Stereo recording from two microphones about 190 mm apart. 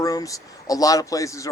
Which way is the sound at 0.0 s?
20° left (ahead or behind).